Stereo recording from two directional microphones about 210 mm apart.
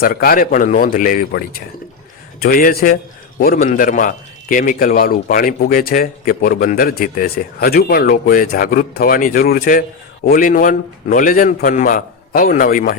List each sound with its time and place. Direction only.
0.0 s a man's voice: 45° left (ahead or behind)